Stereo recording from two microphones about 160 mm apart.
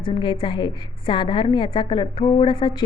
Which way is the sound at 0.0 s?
30° left (ahead or behind).